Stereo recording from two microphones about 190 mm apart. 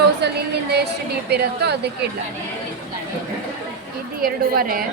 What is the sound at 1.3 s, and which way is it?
Speech, 60° right (ahead or behind).